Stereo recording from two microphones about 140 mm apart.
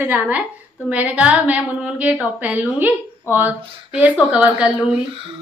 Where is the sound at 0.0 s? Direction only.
10° right (ahead or behind).